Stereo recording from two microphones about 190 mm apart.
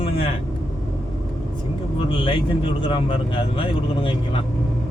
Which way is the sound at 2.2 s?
30° left (ahead or behind).